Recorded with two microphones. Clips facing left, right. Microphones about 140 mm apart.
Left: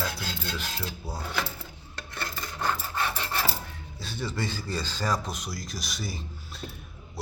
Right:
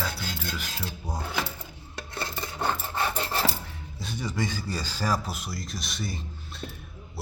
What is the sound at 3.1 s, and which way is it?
Rub, 35° right (ahead or behind).